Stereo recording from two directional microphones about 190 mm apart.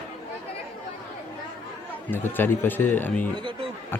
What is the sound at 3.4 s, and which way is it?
Speech, 25° right (ahead or behind).